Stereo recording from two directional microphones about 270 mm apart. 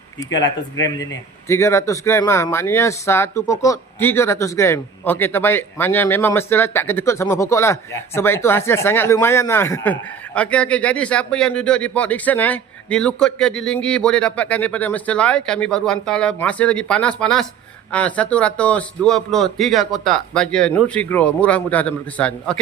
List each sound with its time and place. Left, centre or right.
0.3 s speech: left
1.5 s speech: centre